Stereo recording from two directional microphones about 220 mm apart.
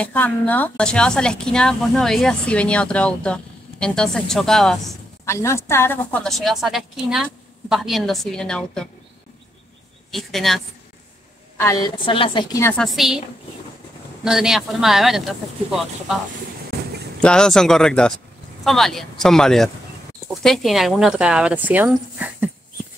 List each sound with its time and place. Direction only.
0.0 s a woman's voice: 10° left (ahead or behind)
5.2 s a woman's voice: 10° left (ahead or behind)
10.1 s a woman's voice: centre (ahead or behind)
11.5 s a woman's voice: 15° left (ahead or behind); by 13.2 s centre (ahead or behind)
14.2 s a woman's voice: centre (ahead or behind)
17.2 s a woman's voice: 5° left (ahead or behind)